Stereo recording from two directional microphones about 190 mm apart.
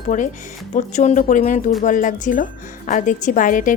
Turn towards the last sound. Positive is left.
turn(degrees=45)  # may be behind; listen again after turning